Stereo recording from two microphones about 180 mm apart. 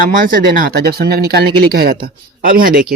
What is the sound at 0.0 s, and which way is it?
Speech, 50° right (ahead or behind).